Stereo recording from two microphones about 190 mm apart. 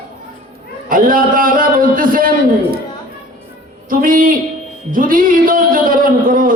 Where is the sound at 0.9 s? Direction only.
45° right (ahead or behind).